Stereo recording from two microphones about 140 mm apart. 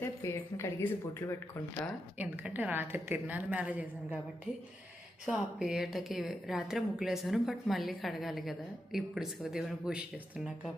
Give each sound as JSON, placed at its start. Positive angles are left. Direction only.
{"t": 0.0, "sound": "speech", "side_deg": 20}
{"t": 2.1, "sound": "a woman's voice", "side_deg": -10}
{"t": 5.2, "sound": "speech", "side_deg": -5}